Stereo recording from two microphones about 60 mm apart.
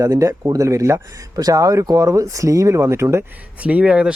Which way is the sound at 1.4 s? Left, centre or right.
Right.